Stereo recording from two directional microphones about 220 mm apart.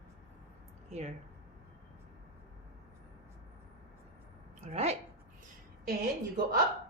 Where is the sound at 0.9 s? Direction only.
30° right (ahead or behind).